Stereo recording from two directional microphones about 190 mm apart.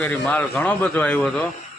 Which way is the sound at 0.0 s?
10° left (ahead or behind).